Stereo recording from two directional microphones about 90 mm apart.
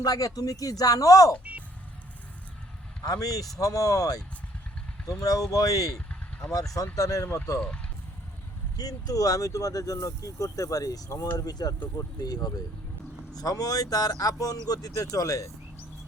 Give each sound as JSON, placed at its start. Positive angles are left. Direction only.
{"t": 0.0, "sound": "speech", "side_deg": 40}
{"t": 3.0, "sound": "speech", "side_deg": 40}
{"t": 5.2, "sound": "speech", "side_deg": 40}
{"t": 8.8, "sound": "speech", "side_deg": 45}